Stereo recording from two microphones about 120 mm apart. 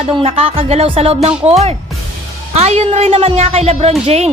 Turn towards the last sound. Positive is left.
turn(degrees=-65)  # may be behind; listen again after turning